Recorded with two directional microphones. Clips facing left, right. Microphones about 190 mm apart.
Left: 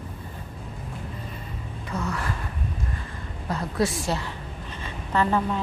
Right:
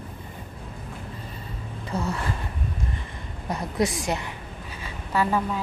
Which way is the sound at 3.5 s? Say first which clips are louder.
Even; 20° right (ahead or behind).